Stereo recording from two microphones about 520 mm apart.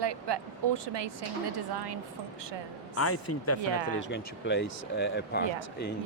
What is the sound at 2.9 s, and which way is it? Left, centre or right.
Speech, left.